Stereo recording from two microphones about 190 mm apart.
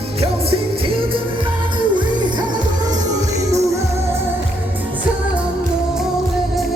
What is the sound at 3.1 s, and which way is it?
Music, 15° right (ahead or behind).